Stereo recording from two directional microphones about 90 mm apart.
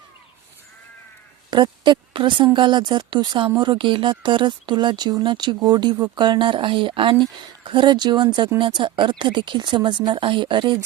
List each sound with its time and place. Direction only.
1.5 s speech: 55° right (ahead or behind)